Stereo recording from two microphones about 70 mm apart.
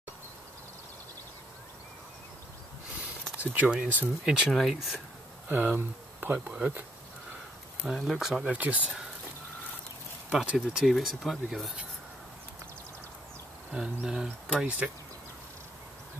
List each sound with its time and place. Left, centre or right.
3.5 s speech: centre
4.2 s speech: centre
5.5 s speech: right
7.8 s speech: centre
8.5 s speech: right
10.3 s speech: centre
13.7 s speech: centre